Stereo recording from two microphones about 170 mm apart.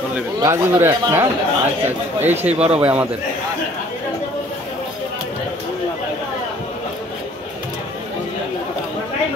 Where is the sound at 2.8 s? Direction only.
10° right (ahead or behind).